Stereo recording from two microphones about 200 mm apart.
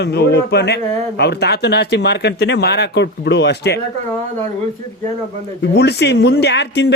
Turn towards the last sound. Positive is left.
turn(degrees=60)  # may be behind; listen again after turning